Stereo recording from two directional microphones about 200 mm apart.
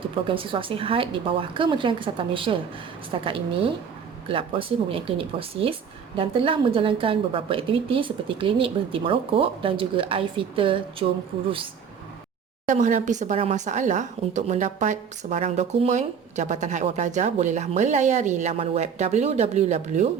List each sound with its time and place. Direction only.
0.3 s a woman's voice: 25° right (ahead or behind)
12.6 s speech: 40° right (ahead or behind)